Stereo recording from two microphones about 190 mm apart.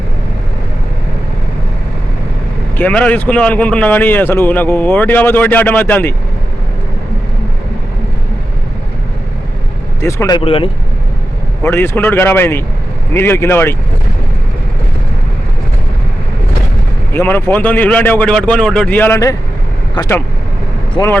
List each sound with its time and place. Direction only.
2.7 s speech: 10° left (ahead or behind)
10.0 s speech: 15° left (ahead or behind)
11.6 s speech: 10° left (ahead or behind)
17.1 s speech: 10° left (ahead or behind)
21.0 s speech: 20° left (ahead or behind)